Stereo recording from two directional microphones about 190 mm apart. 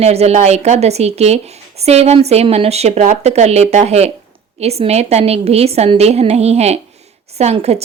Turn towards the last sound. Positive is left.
turn(degrees=-35)  # may be behind; listen again after turning